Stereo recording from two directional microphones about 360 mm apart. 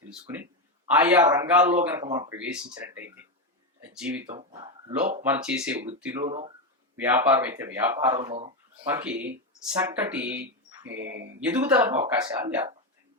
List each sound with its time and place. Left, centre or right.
0.1 s speech: centre
3.8 s a sound: centre
4.3 s a sound: centre
5.2 s speech: centre
6.2 s speech: centre
6.9 s speech: centre
8.9 s speech: centre
10.8 s speech: right
11.3 s speech: centre